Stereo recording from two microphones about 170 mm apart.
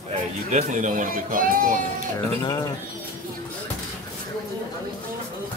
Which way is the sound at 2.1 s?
25° left (ahead or behind).